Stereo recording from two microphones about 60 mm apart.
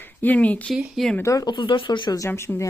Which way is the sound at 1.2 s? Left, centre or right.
Left.